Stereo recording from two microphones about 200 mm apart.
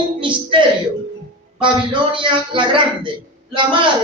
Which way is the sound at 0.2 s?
25° right (ahead or behind).